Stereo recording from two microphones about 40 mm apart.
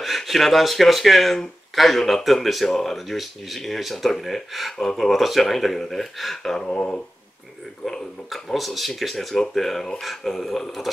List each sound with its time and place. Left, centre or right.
0.0 s speech: centre
6.6 s speech: left
8.3 s speech: centre